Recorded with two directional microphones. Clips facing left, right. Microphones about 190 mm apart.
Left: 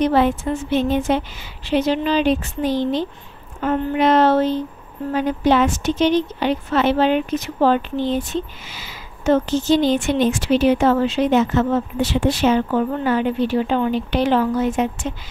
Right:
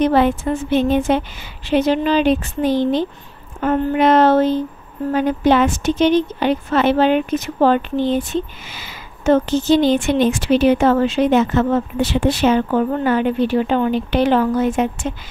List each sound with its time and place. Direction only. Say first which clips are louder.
0.0 s a woman's voice: right 2 dB; 55° right (ahead or behind)